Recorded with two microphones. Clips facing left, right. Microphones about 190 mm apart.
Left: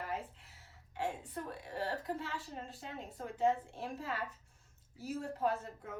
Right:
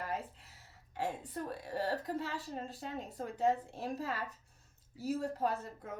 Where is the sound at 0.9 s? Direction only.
40° right (ahead or behind).